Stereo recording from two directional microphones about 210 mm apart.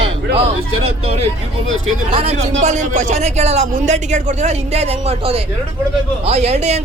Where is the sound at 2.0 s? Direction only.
25° right (ahead or behind).